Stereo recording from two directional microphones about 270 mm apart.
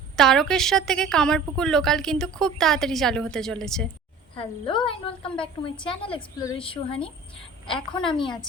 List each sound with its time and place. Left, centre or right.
0.2 s a woman's voice: centre
4.4 s a woman's voice: centre